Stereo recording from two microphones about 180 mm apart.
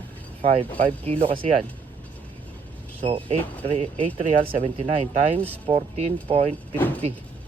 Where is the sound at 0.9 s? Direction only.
30° right (ahead or behind).